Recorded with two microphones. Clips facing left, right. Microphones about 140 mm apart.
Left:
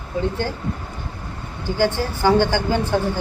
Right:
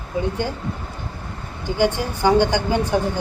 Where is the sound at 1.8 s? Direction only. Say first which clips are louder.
Even; 15° right (ahead or behind).